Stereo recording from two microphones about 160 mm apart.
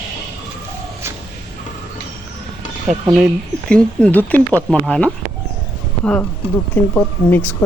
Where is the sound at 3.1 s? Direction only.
5° left (ahead or behind).